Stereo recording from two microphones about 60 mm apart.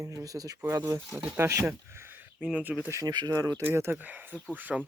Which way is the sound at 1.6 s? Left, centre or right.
Right.